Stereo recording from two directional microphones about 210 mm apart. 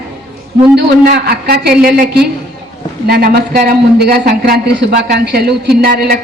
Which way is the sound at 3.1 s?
45° right (ahead or behind).